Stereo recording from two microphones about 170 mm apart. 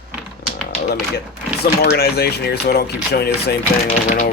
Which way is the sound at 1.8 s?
65° left (ahead or behind).